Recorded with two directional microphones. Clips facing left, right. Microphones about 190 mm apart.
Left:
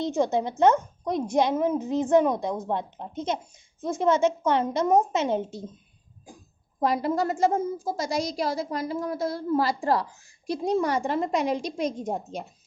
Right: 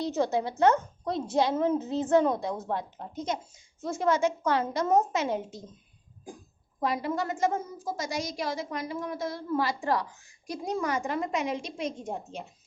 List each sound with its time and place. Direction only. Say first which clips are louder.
0.0 s a woman's voice: left 3 dB; 20° left (ahead or behind)
6.7 s a woman's voice: left 5 dB; 40° left (ahead or behind)